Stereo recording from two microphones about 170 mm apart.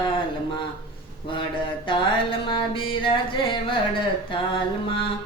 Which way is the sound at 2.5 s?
30° left (ahead or behind).